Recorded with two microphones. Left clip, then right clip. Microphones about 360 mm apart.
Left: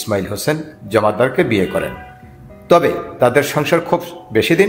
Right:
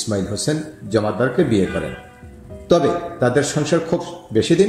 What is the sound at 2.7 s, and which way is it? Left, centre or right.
Speech, centre.